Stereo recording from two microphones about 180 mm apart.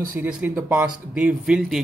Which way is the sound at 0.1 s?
10° right (ahead or behind).